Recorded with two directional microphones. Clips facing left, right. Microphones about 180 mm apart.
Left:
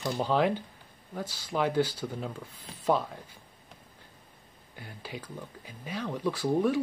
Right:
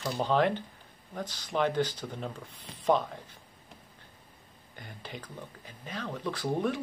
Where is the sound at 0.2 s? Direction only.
10° left (ahead or behind).